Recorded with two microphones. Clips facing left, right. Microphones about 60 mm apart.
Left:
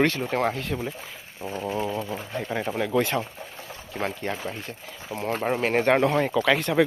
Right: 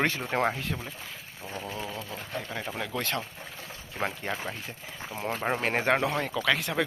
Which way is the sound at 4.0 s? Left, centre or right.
Centre.